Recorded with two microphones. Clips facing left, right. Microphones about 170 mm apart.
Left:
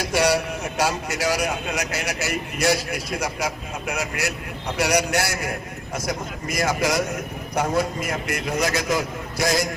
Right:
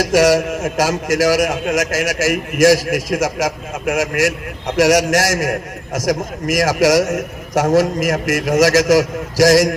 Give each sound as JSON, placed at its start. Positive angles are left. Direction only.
{"t": 0.0, "sound": "a man's voice", "side_deg": -90}
{"t": 0.4, "sound": "a man's voice", "side_deg": -45}
{"t": 0.8, "sound": "a man's voice", "side_deg": -90}